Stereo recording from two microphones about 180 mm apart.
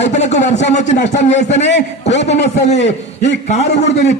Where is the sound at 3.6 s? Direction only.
70° left (ahead or behind).